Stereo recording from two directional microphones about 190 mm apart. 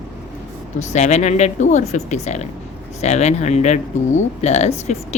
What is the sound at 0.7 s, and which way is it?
Speech, 35° left (ahead or behind).